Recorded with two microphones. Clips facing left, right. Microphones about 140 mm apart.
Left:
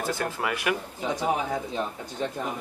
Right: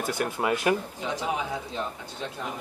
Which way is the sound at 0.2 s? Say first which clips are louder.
Right 3 dB; 20° right (ahead or behind).